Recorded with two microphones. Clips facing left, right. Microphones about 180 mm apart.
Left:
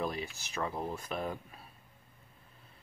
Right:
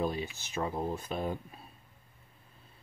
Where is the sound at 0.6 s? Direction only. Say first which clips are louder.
Right 3 dB; 20° right (ahead or behind).